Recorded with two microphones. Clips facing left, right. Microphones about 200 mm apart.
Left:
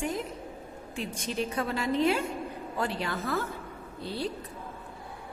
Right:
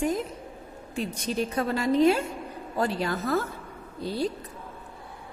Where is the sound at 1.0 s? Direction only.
40° right (ahead or behind).